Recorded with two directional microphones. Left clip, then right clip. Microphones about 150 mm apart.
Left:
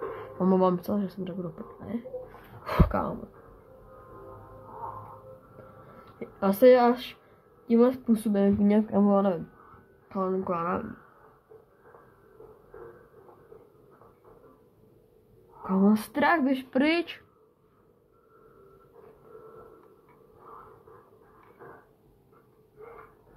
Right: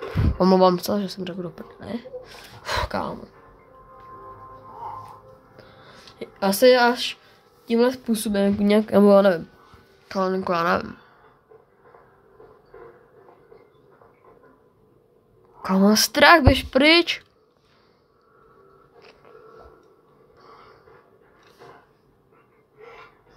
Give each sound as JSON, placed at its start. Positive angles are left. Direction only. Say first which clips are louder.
{"t": 0.4, "sound": "speech", "louder": "right 8 dB", "side_deg": -35}
{"t": 2.6, "sound": "speech", "louder": "right 3 dB", "side_deg": -20}
{"t": 5.9, "sound": "a sound", "louder": "right 5 dB", "side_deg": -25}
{"t": 7.6, "sound": "speech", "louder": "right 3 dB", "side_deg": -20}
{"t": 8.9, "sound": "a woman's voice", "louder": "right 10 dB", "side_deg": -55}
{"t": 15.6, "sound": "a woman's voice", "louder": "right 7 dB", "side_deg": -80}
{"t": 16.7, "sound": "a woman's voice", "louder": "right 11 dB", "side_deg": -30}